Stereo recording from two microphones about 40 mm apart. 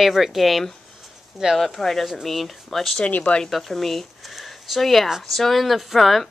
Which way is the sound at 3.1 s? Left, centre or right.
Left.